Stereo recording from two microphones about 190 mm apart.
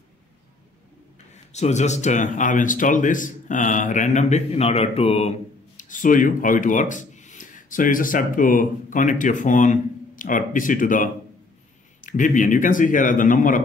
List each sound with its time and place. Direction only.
1.3 s speech: 35° left (ahead or behind)
5.8 s speech: 45° left (ahead or behind)